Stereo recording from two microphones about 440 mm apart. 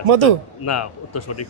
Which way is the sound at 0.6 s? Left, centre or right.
Left.